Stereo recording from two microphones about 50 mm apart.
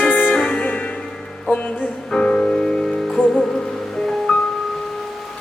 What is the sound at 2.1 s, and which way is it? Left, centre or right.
Music, left.